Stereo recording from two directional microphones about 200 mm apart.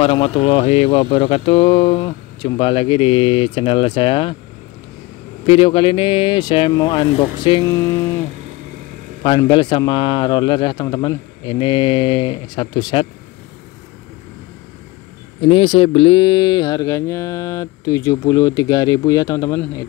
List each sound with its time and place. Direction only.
0.0 s speech: 30° left (ahead or behind)
5.5 s speech: 25° left (ahead or behind)
9.2 s speech: 25° left (ahead or behind)
15.4 s speech: 25° left (ahead or behind)